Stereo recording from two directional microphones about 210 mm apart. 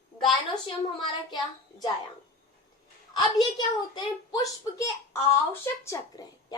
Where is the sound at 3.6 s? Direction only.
20° left (ahead or behind).